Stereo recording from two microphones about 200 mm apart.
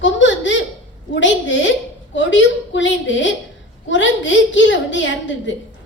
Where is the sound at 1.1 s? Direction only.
65° left (ahead or behind).